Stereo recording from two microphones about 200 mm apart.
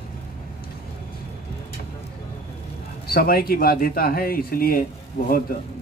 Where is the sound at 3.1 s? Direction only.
50° left (ahead or behind).